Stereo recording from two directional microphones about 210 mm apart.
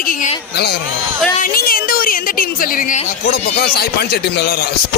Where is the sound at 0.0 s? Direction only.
40° left (ahead or behind).